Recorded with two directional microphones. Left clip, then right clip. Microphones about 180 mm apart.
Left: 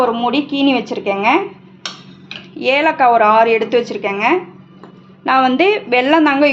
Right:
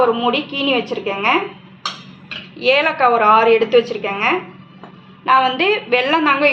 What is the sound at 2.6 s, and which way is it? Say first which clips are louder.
A woman's voice: left 2 dB; 60° left (ahead or behind).